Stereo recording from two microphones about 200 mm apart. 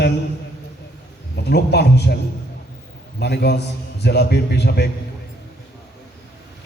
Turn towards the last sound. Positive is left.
turn(degrees=55)  # may be behind; listen again after turning